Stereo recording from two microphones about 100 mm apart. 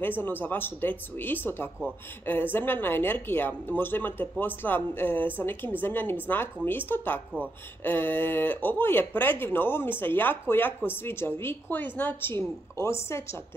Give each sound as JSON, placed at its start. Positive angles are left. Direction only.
{"t": 0.2, "sound": "speech", "side_deg": 20}